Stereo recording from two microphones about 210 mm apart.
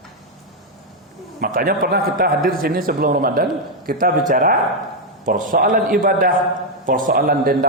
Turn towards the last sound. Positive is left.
turn(degrees=-45)  # may be behind; listen again after turning